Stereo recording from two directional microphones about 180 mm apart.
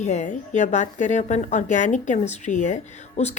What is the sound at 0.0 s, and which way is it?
A woman's voice, 40° left (ahead or behind).